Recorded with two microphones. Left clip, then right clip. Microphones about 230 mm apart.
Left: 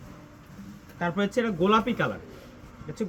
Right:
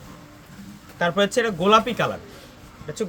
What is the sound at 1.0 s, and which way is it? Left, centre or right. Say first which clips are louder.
Speech: right 7 dB; right.